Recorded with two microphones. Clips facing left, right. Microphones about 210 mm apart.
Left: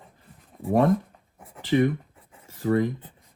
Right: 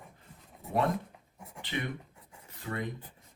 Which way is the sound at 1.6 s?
45° left (ahead or behind).